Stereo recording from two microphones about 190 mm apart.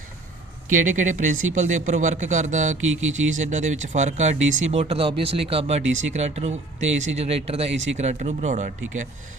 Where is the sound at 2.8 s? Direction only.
90° right.